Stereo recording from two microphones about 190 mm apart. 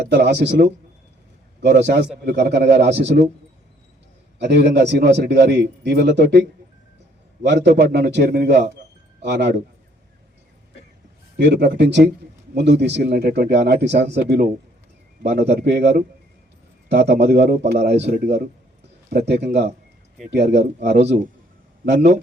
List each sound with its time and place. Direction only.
0.0 s a man's voice: 65° right (ahead or behind)
4.4 s a man's voice: 65° right (ahead or behind)
7.4 s a man's voice: 65° right (ahead or behind)
11.3 s a man's voice: 65° right (ahead or behind)
16.9 s a man's voice: 60° right (ahead or behind)